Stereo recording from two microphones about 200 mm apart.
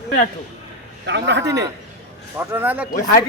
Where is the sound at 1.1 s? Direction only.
60° right (ahead or behind).